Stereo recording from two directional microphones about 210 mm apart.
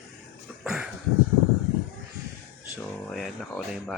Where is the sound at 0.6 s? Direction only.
5° right (ahead or behind).